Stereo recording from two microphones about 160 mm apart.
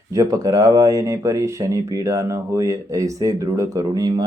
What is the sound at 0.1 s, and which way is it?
Speech, 20° right (ahead or behind).